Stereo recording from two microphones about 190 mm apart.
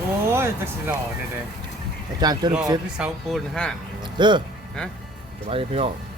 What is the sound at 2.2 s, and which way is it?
Speech, 20° right (ahead or behind).